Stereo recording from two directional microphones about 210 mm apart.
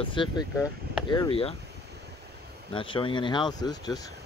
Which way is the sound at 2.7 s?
25° left (ahead or behind).